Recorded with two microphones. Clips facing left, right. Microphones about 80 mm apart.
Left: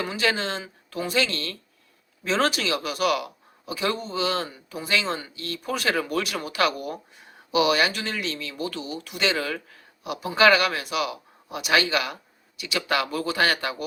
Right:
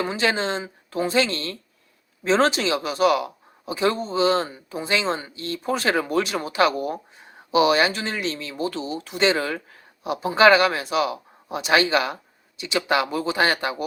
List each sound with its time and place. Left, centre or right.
0.0 s speech: right